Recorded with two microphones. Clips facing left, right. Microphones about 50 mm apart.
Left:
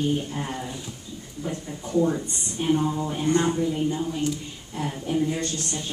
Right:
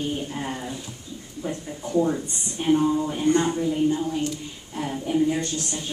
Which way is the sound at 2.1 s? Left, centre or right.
Centre.